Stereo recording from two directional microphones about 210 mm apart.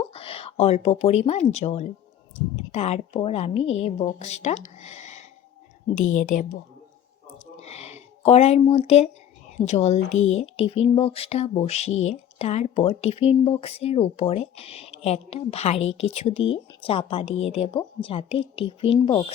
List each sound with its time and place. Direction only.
0.1 s a woman's voice: 25° left (ahead or behind)
7.6 s a sound: 30° left (ahead or behind)
8.6 s speech: 30° left (ahead or behind)